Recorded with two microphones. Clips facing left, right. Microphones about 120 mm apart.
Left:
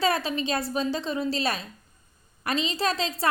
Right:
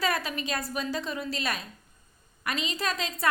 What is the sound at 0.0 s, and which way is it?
A woman's voice, 30° left (ahead or behind).